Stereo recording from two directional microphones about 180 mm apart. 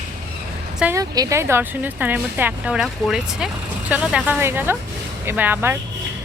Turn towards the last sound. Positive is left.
turn(degrees=-10)  # may be behind; listen again after turning